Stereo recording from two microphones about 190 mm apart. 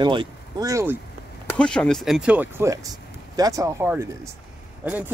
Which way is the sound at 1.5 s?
5° left (ahead or behind).